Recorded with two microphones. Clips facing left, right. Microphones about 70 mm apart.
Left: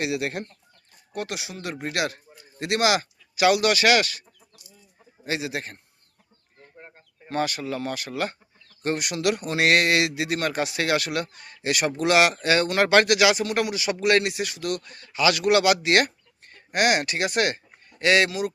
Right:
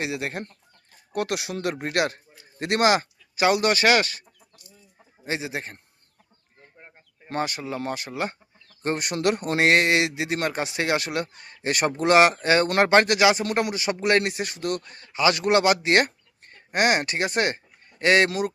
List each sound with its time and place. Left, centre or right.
0.0 s a man's voice: right
1.1 s speech: right
1.8 s speech: right
5.2 s speech: right
7.3 s a man's voice: right